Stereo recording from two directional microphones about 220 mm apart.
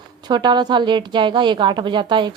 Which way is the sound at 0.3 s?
20° right (ahead or behind).